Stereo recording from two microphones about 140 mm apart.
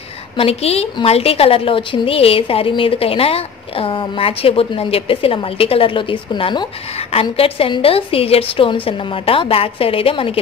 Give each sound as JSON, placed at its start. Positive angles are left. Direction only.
{"t": 0.4, "sound": "a woman's voice", "side_deg": 45}